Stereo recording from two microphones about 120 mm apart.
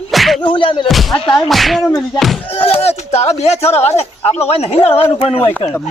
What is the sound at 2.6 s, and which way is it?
Speech, 55° left (ahead or behind).